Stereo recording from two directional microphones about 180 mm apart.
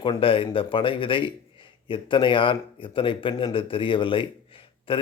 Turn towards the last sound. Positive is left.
turn(degrees=30)  # may be behind; listen again after turning